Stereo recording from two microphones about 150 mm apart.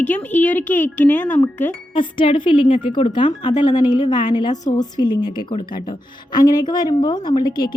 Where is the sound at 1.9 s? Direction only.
35° left (ahead or behind).